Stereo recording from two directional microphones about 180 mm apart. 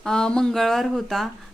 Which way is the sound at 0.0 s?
5° left (ahead or behind).